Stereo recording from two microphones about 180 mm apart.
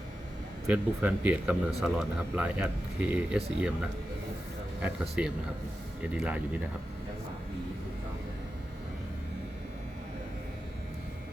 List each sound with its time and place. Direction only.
0.7 s speech: 5° right (ahead or behind)